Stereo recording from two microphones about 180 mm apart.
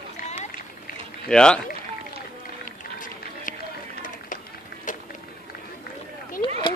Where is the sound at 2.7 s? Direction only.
45° left (ahead or behind).